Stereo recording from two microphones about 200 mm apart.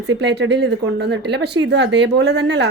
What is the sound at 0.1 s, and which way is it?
Speech, 60° right (ahead or behind).